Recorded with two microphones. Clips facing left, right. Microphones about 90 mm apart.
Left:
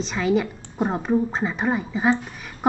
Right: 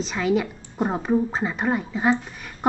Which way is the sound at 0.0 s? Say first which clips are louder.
Left 1 dB; centre (ahead or behind).